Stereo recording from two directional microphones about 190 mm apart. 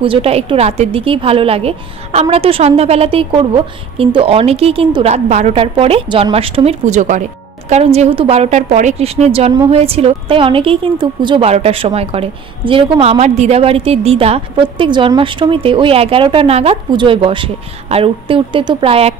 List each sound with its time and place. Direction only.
0.0 s a woman's voice: 30° right (ahead or behind)